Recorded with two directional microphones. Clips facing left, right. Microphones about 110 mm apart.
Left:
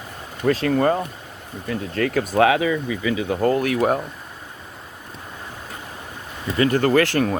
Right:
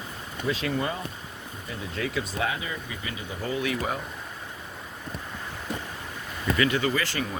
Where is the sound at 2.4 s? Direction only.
90° left.